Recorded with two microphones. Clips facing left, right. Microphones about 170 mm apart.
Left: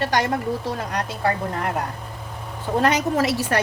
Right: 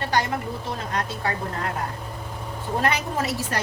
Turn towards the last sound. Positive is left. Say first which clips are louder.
# left 6 dB
turn(degrees=80)